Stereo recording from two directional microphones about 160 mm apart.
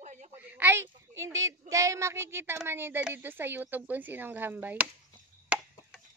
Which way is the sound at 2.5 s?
15° right (ahead or behind).